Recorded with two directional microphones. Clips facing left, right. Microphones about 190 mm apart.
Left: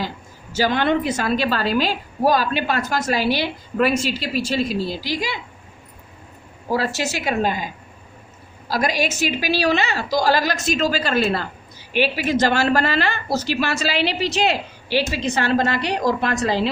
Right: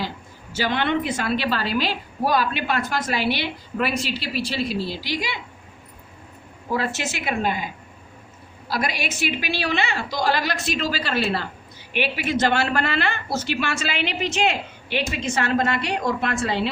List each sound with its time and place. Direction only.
0.5 s a woman's voice: 40° left (ahead or behind)
6.7 s a woman's voice: 35° left (ahead or behind)